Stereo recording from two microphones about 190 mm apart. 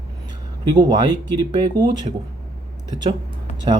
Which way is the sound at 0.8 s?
20° right (ahead or behind).